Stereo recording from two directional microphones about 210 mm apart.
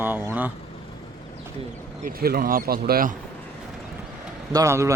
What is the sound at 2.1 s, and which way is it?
Speech, 45° right (ahead or behind).